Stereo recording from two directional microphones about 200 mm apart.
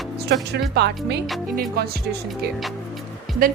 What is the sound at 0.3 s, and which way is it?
Speech, 60° right (ahead or behind).